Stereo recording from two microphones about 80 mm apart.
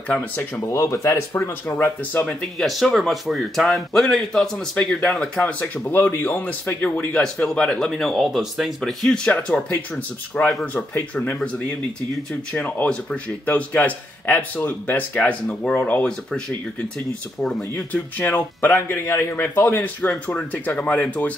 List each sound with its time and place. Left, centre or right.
0.1 s a man's voice: left
0.7 s speech: left
2.2 s a man's voice: centre
17.4 s speech: centre
17.7 s a man's voice: centre